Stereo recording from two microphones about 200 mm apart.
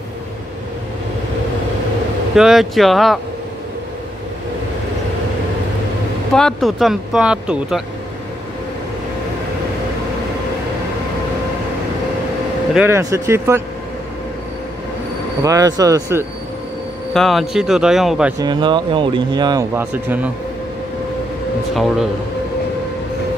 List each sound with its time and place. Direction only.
2.3 s speech: centre (ahead or behind)
6.3 s speech: centre (ahead or behind)
12.7 s speech: 10° right (ahead or behind)
15.4 s speech: 15° right (ahead or behind)
17.1 s speech: centre (ahead or behind)
18.4 s speech: 20° right (ahead or behind)